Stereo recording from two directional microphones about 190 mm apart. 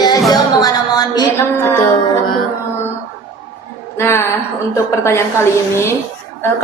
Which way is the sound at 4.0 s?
15° left (ahead or behind).